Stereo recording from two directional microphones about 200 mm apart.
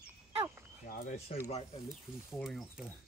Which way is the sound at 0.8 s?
50° left (ahead or behind).